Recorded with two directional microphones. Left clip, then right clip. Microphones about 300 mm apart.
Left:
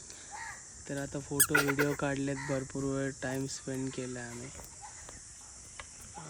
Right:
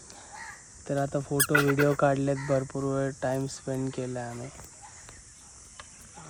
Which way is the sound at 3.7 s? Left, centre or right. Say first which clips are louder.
Right 6 dB; left.